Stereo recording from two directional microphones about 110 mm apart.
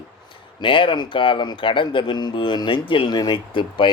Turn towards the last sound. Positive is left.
turn(degrees=45)  # may be behind; listen again after turning